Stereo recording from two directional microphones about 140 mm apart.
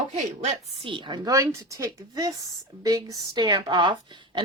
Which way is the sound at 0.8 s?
35° right (ahead or behind).